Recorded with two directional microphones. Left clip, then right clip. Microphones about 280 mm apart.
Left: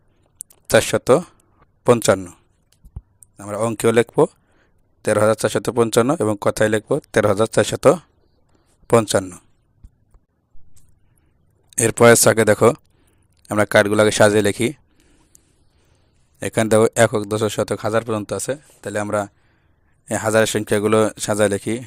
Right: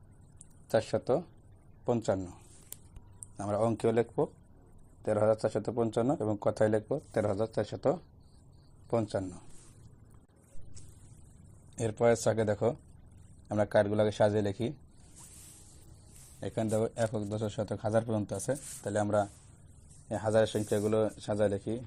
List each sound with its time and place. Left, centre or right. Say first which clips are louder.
0.3 s a sound: left 14 dB; left
1.8 s a man's voice: left 16 dB; left
3.3 s a man's voice: left 8 dB; left
11.7 s a man's voice: left 16 dB; left
16.4 s a man's voice: left 16 dB; left
18.3 s speech: left 10 dB; left
18.9 s a man's voice: left 8 dB; left